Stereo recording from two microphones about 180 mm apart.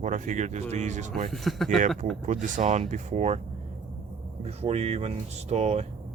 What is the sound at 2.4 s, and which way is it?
Speech, 40° right (ahead or behind).